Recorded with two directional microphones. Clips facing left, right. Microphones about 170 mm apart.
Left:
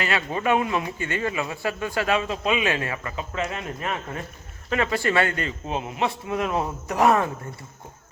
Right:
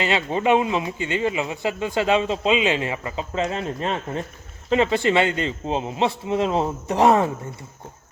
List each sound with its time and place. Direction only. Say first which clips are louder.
0.0 s speech: right 4 dB; 25° right (ahead or behind)